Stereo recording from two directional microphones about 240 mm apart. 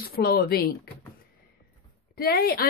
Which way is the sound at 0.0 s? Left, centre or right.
Left.